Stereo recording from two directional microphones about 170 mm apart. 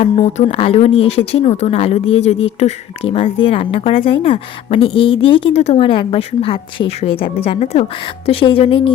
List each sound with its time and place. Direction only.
0.0 s a woman's voice: 35° left (ahead or behind)